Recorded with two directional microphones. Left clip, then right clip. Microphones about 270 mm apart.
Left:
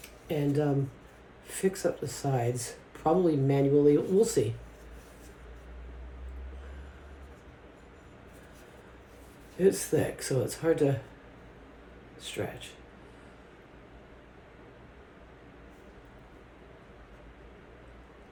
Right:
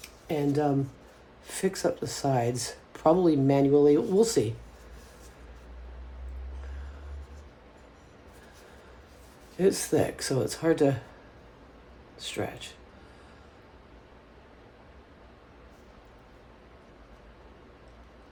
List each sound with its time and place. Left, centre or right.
0.3 s speech: right
9.6 s speech: right